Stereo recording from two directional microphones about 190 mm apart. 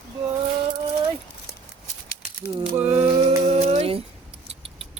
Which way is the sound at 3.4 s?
35° right (ahead or behind).